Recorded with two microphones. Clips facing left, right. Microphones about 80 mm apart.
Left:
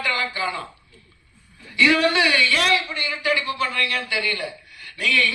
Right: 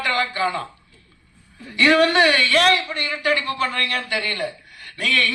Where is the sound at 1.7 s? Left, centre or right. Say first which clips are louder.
Right 3 dB; right.